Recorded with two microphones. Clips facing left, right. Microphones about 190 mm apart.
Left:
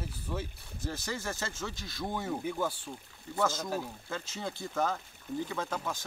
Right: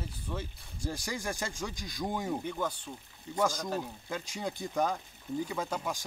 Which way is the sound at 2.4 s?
5° left (ahead or behind).